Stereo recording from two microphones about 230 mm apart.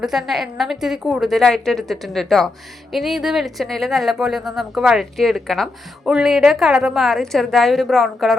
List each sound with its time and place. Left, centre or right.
0.0 s speech: centre